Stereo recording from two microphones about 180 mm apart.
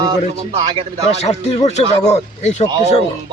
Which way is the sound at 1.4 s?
40° left (ahead or behind).